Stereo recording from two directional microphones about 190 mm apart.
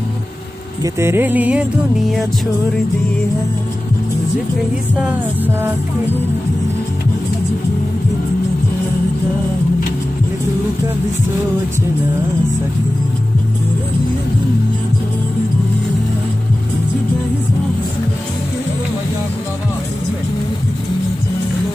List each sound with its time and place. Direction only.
0.9 s music: 15° right (ahead or behind)